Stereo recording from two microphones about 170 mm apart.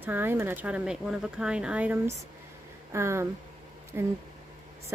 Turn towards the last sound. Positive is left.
turn(degrees=-15)  # may be behind; listen again after turning